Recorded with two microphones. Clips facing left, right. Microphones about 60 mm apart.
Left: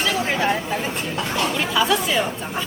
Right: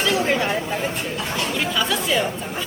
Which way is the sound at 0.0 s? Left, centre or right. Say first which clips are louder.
Right 1 dB; centre.